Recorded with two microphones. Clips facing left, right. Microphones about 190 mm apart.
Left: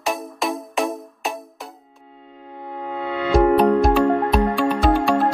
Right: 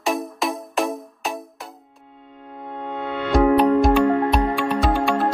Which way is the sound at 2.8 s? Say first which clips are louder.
Left 2 dB; 5° left (ahead or behind).